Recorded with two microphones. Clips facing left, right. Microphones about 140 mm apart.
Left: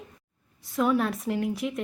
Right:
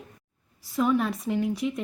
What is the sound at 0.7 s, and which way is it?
Speech, centre (ahead or behind).